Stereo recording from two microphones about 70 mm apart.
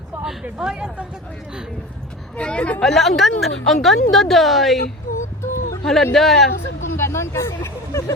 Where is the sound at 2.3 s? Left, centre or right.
Centre.